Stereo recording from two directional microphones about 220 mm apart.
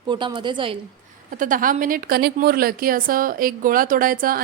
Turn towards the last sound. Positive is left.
turn(degrees=-40)  # may be behind; listen again after turning